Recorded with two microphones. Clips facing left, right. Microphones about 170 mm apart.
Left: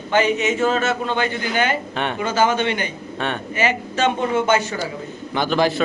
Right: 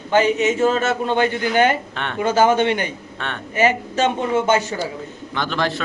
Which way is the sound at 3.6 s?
40° right (ahead or behind).